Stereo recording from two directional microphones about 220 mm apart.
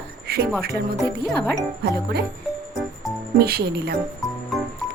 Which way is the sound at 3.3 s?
45° right (ahead or behind).